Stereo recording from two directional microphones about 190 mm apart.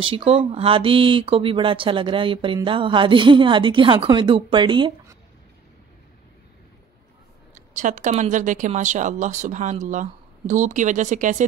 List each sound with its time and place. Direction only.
0.0 s speech: 30° right (ahead or behind)
7.5 s speech: 40° right (ahead or behind)